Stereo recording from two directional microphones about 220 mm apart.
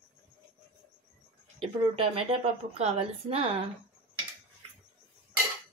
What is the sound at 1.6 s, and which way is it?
Speech, 25° right (ahead or behind).